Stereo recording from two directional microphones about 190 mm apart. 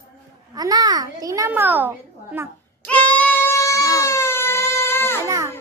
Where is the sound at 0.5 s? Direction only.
20° right (ahead or behind).